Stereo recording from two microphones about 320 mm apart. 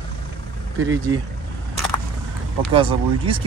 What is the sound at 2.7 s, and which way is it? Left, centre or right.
Speech, centre.